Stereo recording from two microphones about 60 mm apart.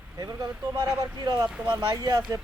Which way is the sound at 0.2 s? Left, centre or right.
Right.